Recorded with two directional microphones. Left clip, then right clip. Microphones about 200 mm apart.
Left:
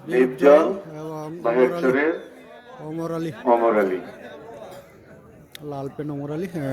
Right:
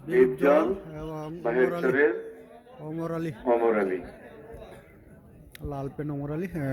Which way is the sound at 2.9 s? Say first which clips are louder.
Left 4 dB; centre (ahead or behind).